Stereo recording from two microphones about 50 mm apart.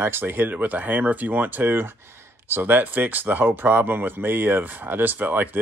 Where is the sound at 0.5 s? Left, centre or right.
Right.